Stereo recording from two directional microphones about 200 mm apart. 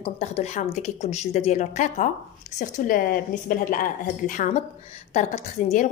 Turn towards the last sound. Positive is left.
turn(degrees=40)  # may be behind; listen again after turning